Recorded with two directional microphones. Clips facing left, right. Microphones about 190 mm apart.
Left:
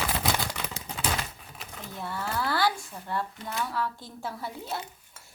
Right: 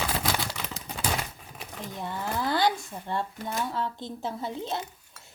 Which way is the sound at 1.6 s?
20° right (ahead or behind).